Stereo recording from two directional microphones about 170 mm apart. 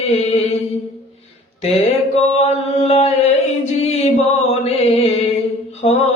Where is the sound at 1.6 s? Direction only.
35° left (ahead or behind).